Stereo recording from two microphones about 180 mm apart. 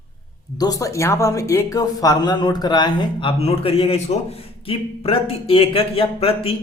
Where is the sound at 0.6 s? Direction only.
20° left (ahead or behind).